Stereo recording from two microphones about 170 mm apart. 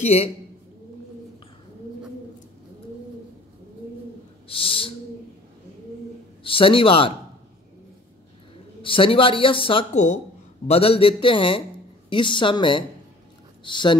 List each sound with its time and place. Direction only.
0.0 s speech: 40° left (ahead or behind)
4.5 s speech: 30° left (ahead or behind)
6.4 s speech: 30° left (ahead or behind)
8.8 s speech: 30° left (ahead or behind)
9.9 s speech: 45° left (ahead or behind)
10.7 s a woman's voice: 35° left (ahead or behind)